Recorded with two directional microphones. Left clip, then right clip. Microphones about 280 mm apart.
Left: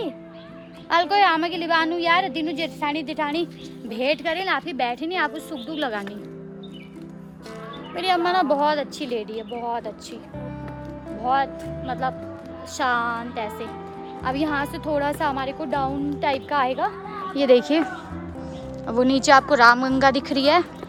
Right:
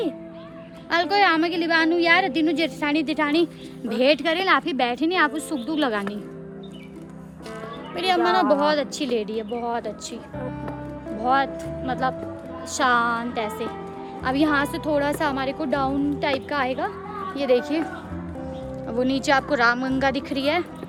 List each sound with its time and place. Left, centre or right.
0.9 s a woman's voice: centre
7.9 s a woman's voice: centre
11.1 s a woman's voice: centre
17.3 s a woman's voice: left; by 20.7 s centre